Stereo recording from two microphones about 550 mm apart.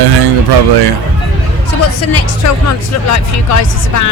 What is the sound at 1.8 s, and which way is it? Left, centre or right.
Speech, left.